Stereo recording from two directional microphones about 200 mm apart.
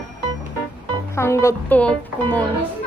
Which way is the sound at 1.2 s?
15° left (ahead or behind).